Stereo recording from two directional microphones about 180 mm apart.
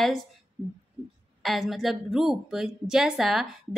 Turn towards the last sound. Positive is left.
turn(degrees=0)  # may be behind; listen again after turning